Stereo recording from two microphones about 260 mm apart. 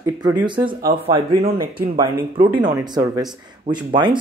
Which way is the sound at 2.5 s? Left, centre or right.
Centre.